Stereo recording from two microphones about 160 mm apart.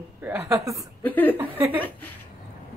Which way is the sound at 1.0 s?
10° left (ahead or behind).